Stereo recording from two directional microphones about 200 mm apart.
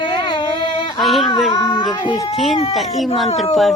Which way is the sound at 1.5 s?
25° left (ahead or behind).